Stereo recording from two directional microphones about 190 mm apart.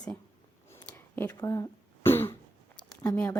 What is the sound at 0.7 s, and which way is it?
Throat clearing, 10° left (ahead or behind).